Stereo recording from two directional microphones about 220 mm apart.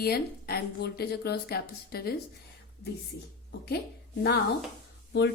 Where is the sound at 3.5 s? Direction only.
45° left (ahead or behind).